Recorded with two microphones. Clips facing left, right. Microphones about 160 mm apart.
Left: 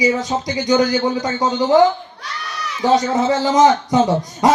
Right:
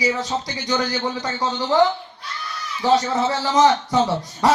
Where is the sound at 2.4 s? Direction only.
75° left (ahead or behind).